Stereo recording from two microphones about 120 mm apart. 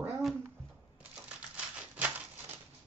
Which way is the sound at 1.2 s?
10° right (ahead or behind).